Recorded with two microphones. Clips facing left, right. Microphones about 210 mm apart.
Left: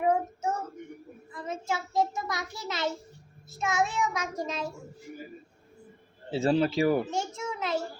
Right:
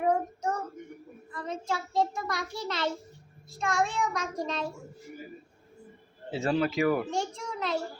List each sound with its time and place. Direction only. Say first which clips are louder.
0.0 s child singing: left 1 dB; 5° left (ahead or behind)
2.6 s a child's voice: left 1 dB; 5° left (ahead or behind)
6.3 s a man's voice: left 3 dB; 30° left (ahead or behind)
7.0 s a child's voice: even; 5° left (ahead or behind)